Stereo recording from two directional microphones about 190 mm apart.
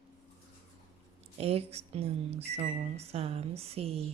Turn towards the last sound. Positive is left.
turn(degrees=-30)  # may be behind; listen again after turning